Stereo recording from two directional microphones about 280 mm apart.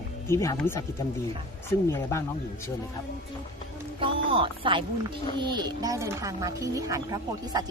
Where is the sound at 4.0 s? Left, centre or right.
Centre.